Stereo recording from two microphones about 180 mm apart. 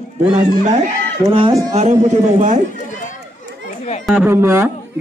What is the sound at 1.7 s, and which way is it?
Speech, 40° right (ahead or behind).